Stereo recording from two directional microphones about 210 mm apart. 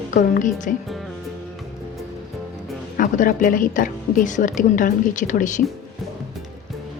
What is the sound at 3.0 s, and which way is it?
A woman's voice, 40° left (ahead or behind).